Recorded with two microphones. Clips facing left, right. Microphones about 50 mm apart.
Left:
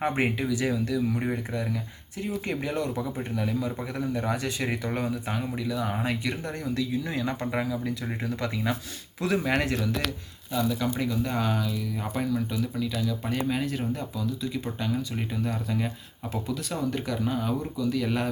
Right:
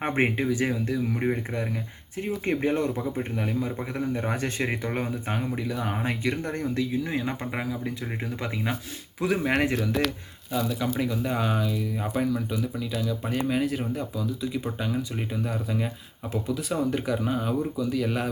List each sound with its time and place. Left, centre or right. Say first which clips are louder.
0.0 s a man's voice: right 2 dB; right
7.0 s speech: even; right; by 18.3 s centre